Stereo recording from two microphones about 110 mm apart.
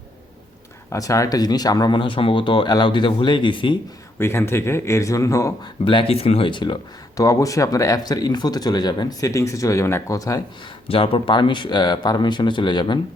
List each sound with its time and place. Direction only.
0.9 s speech: 30° left (ahead or behind); by 3.8 s 50° left (ahead or behind)
4.2 s speech: 25° left (ahead or behind)
5.8 s speech: 50° left (ahead or behind)
7.2 s speech: 30° left (ahead or behind)
10.8 s speech: 55° left (ahead or behind)